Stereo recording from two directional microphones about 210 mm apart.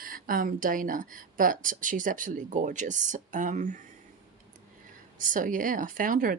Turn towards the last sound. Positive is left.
turn(degrees=-40)  # may be behind; listen again after turning